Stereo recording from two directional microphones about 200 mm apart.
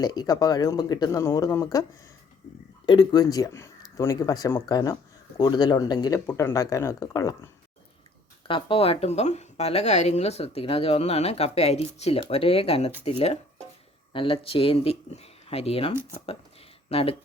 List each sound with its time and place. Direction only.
0.0 s speech: 20° left (ahead or behind)
2.8 s speech: 20° left (ahead or behind)